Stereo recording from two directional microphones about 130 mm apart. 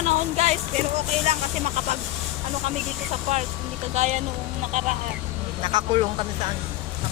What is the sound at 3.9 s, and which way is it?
Speech, 65° right (ahead or behind).